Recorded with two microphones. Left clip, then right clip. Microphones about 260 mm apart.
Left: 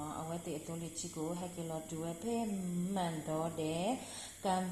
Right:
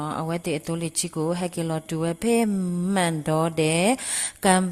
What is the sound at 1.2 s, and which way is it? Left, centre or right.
A woman's voice, right.